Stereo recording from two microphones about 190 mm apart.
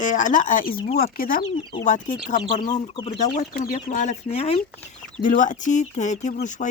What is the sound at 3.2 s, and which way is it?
Speech, 45° left (ahead or behind).